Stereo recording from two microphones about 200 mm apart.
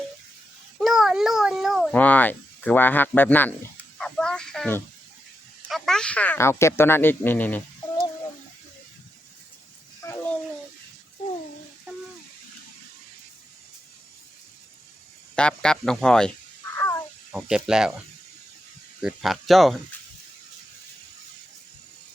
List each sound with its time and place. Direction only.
0.8 s cat: centre (ahead or behind)
5.6 s speech: centre (ahead or behind)
10.0 s dog: 10° left (ahead or behind)
15.4 s speech: 5° left (ahead or behind)
16.7 s a sound: 15° left (ahead or behind)
17.3 s speech: 5° right (ahead or behind)
19.0 s speech: centre (ahead or behind)